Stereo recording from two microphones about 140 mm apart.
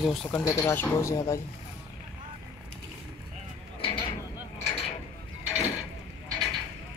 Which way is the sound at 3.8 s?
40° left (ahead or behind).